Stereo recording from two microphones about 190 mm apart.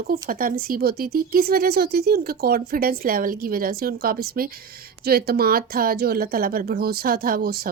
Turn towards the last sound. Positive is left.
turn(degrees=-55)  # may be behind; listen again after turning